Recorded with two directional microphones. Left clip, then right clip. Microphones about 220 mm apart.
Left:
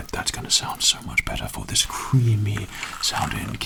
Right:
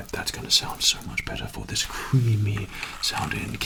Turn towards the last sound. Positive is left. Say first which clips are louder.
# left 3 dB
turn(degrees=30)  # may be behind; listen again after turning